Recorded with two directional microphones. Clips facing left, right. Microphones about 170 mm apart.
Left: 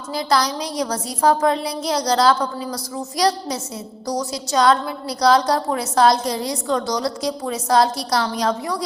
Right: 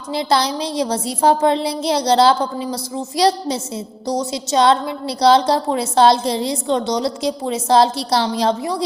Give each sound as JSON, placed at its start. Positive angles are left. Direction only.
{"t": 0.1, "sound": "a woman's voice", "side_deg": -25}